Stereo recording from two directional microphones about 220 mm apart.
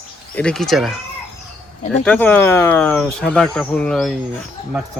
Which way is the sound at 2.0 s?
5° left (ahead or behind).